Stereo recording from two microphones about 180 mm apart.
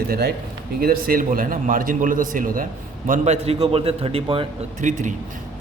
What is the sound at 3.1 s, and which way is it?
A man's voice, 40° right (ahead or behind).